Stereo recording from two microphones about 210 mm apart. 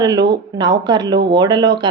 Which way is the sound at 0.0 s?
20° right (ahead or behind).